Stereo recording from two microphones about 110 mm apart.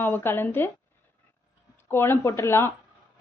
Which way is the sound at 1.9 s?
20° left (ahead or behind).